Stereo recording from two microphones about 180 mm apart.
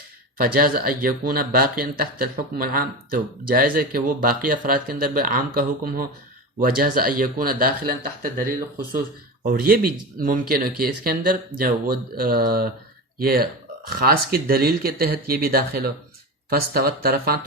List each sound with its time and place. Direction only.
0.3 s speech: 55° right (ahead or behind)